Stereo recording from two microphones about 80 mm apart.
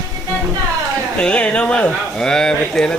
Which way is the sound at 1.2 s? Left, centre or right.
Centre.